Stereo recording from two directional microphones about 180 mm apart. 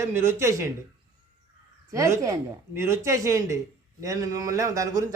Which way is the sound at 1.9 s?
15° right (ahead or behind).